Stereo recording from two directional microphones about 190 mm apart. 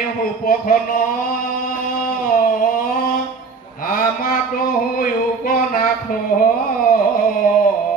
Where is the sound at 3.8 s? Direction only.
45° left (ahead or behind).